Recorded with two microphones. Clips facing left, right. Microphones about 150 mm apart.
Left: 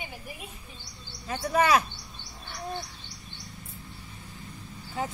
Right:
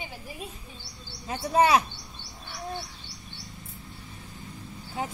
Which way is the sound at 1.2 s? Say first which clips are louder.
Right 2 dB; 25° right (ahead or behind).